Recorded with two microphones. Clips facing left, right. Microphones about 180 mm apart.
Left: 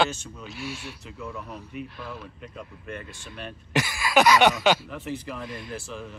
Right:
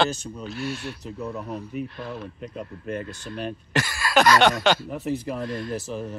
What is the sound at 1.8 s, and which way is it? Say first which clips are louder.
Speech: right 5 dB; 5° left (ahead or behind).